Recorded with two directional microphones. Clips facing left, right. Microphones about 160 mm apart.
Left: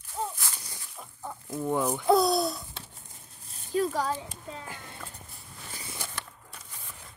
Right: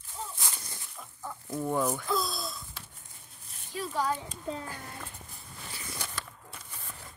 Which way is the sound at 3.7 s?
40° left (ahead or behind).